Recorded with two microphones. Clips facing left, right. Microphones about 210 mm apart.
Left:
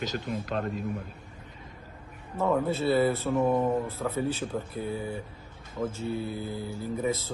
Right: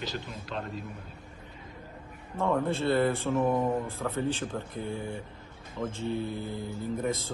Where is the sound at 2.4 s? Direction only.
5° left (ahead or behind).